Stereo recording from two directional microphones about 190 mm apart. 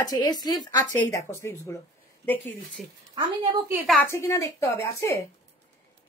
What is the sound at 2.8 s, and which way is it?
Speech, centre (ahead or behind).